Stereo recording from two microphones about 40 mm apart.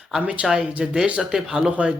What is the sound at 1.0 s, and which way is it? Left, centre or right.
Speech, right.